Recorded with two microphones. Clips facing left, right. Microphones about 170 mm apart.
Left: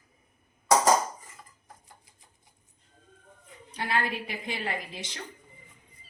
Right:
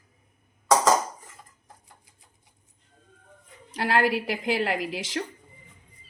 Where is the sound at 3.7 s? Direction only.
90° right.